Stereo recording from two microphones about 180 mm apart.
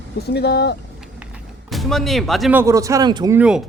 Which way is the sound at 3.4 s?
5° right (ahead or behind).